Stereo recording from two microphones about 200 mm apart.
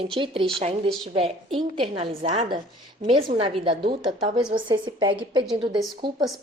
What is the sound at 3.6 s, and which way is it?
A woman's voice, 25° right (ahead or behind).